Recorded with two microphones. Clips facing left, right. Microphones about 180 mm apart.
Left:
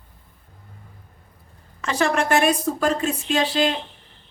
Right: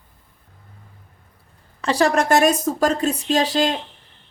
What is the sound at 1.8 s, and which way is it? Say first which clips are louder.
A woman's voice: right 3 dB; 35° right (ahead or behind).